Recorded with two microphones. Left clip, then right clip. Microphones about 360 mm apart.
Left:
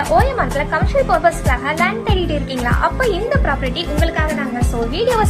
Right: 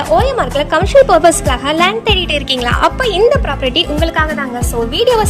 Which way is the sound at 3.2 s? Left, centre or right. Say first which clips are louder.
Right 6 dB; centre.